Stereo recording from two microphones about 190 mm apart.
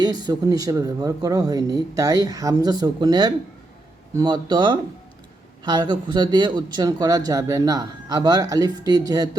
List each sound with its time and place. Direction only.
0.0 s speech: 20° right (ahead or behind)